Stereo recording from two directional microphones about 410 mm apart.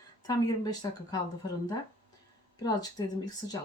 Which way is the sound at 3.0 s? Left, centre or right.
Centre.